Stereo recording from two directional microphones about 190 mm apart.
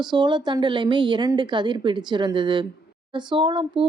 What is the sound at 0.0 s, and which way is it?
Speech, 25° right (ahead or behind).